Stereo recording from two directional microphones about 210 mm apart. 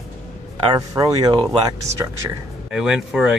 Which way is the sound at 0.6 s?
20° right (ahead or behind).